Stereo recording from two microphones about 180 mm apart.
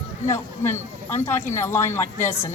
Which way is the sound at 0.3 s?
15° left (ahead or behind).